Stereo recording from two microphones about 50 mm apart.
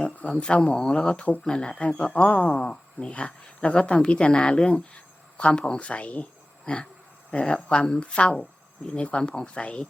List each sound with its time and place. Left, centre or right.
0.2 s speech: left
0.7 s speech: centre
2.2 s speech: left
2.6 s speech: centre
7.3 s speech: left